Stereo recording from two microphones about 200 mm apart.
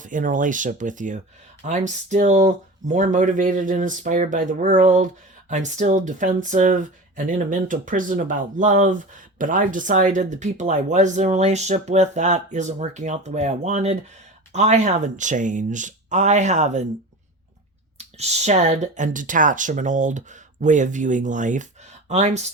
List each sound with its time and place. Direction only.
0.0 s speech: 40° right (ahead or behind)
17.9 s speech: 35° right (ahead or behind)